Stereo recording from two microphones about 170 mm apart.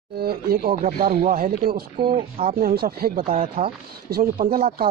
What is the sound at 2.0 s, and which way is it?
Speech, 30° right (ahead or behind).